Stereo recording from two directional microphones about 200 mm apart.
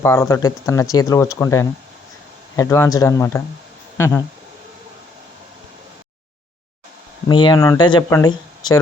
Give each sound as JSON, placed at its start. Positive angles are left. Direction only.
{"t": 0.0, "sound": "speech", "side_deg": 15}
{"t": 7.3, "sound": "speech", "side_deg": 25}